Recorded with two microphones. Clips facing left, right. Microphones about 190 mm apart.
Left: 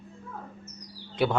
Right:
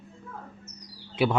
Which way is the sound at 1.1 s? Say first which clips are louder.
Right 1 dB; 5° right (ahead or behind).